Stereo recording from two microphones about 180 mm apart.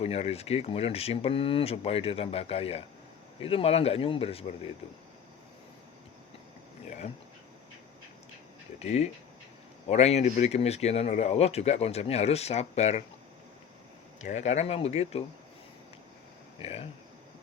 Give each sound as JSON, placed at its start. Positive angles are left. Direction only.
{"t": 0.0, "sound": "speech", "side_deg": 35}
{"t": 8.8, "sound": "speech", "side_deg": 40}
{"t": 14.2, "sound": "speech", "side_deg": 40}
{"t": 16.6, "sound": "speech", "side_deg": 30}